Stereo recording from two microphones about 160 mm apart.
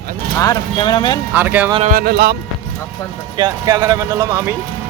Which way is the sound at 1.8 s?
65° right (ahead or behind).